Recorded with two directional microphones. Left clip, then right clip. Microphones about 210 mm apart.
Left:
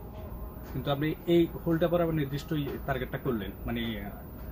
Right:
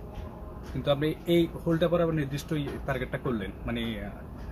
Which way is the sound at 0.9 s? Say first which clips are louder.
Right 2 dB; 20° right (ahead or behind).